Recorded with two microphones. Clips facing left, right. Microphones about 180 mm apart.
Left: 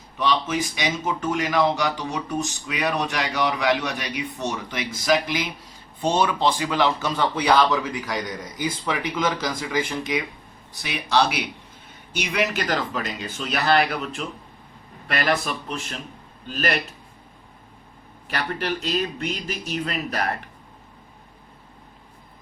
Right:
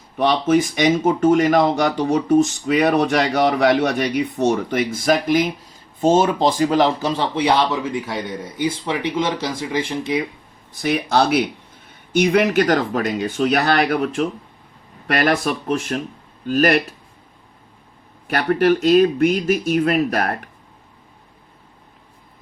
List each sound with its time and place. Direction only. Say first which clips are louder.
0.2 s speech: right 7 dB; 55° right (ahead or behind)
7.1 s a man's voice: right 2 dB; 30° right (ahead or behind)
10.8 s speech: right 5 dB; 50° right (ahead or behind)
18.3 s speech: right 11 dB; 55° right (ahead or behind)